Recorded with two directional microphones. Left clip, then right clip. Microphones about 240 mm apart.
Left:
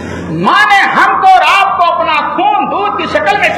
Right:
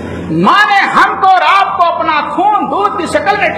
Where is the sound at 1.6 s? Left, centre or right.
Right.